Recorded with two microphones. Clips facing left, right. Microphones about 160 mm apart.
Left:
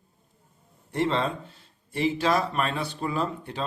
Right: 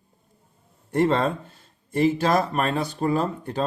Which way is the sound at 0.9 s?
50° right (ahead or behind).